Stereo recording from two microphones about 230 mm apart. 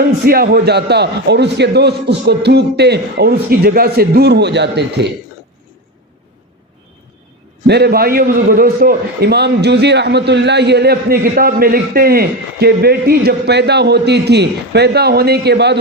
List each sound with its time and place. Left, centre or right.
0.3 s a man's voice: right
7.7 s a man's voice: right